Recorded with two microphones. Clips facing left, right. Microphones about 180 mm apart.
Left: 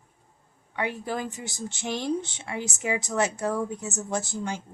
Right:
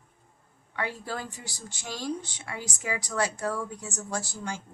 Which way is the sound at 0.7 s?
20° left (ahead or behind).